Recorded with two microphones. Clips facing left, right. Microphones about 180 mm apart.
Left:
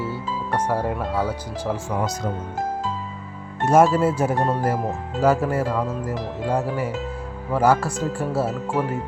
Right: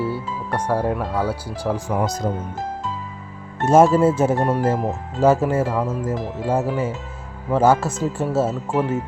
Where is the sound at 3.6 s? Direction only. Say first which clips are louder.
Right 3 dB; 25° right (ahead or behind).